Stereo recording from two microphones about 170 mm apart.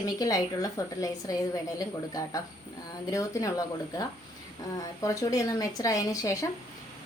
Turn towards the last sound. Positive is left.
turn(degrees=20)  # may be behind; listen again after turning